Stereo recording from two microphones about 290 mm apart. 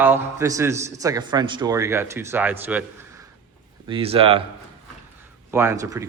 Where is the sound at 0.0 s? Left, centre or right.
Centre.